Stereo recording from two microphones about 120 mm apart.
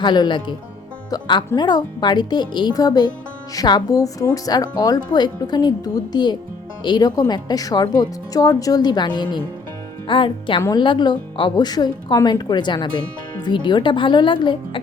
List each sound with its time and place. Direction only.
0.0 s speech: 40° left (ahead or behind)